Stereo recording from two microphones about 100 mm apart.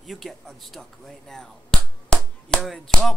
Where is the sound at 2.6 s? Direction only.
5° left (ahead or behind).